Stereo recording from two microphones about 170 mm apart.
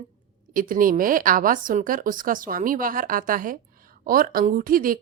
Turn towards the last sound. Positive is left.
turn(degrees=-55)  # may be behind; listen again after turning